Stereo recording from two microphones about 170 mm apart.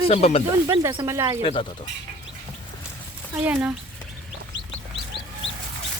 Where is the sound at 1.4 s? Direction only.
30° left (ahead or behind).